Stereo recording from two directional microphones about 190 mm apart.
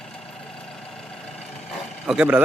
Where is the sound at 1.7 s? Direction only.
5° right (ahead or behind).